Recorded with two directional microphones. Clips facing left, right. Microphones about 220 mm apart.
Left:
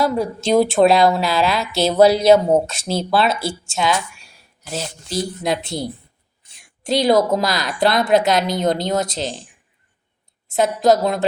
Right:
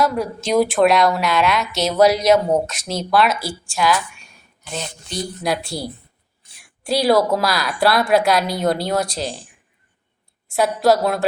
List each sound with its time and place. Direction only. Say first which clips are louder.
0.0 s a woman's voice: left 1 dB; 25° left (ahead or behind)
4.7 s a woman's voice: left 3 dB; 5° left (ahead or behind)
5.4 s a woman's voice: left 1 dB; 20° left (ahead or behind)
10.5 s a woman's voice: left 1 dB; 20° left (ahead or behind)